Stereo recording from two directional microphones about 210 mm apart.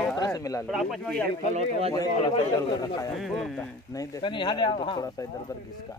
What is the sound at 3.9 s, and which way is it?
Speech, 20° left (ahead or behind).